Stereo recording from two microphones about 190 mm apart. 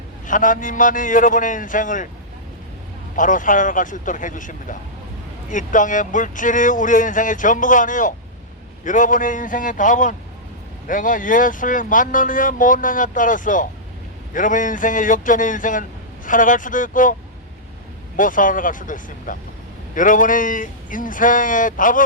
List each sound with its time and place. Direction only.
0.3 s speech: 45° left (ahead or behind)
3.2 s speech: 45° left (ahead or behind)
18.2 s speech: 45° left (ahead or behind)